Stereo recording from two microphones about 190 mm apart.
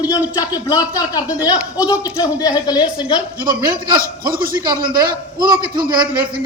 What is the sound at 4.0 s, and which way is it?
A man's voice, 50° right (ahead or behind).